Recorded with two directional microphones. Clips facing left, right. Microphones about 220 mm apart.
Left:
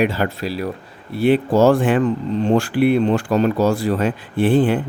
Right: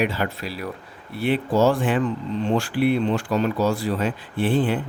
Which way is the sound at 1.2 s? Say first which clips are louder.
Left 5 dB; 45° left (ahead or behind).